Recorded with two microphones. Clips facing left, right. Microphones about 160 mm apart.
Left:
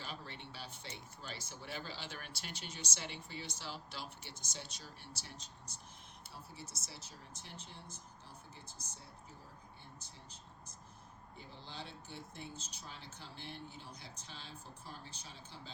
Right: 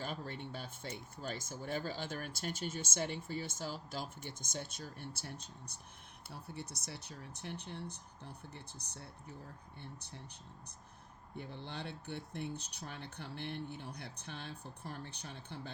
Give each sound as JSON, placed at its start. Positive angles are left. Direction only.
{"t": 0.0, "sound": "speech", "side_deg": -50}
{"t": 11.3, "sound": "speech", "side_deg": -60}